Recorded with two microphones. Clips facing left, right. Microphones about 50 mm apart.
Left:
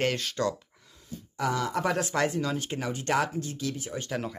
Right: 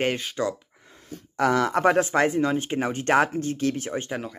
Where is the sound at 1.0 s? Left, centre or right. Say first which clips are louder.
Right 7 dB; right.